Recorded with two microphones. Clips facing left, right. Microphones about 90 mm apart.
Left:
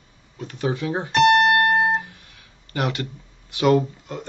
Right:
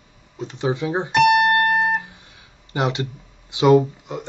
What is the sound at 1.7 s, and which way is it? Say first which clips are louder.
Music: even; 25° left (ahead or behind).